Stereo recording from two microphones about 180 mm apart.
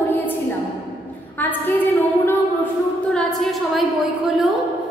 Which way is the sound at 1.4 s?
10° left (ahead or behind).